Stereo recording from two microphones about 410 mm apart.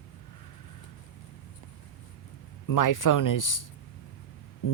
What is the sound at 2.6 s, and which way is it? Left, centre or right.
Speech, left.